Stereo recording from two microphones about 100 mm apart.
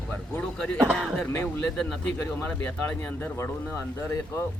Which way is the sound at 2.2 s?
20° left (ahead or behind).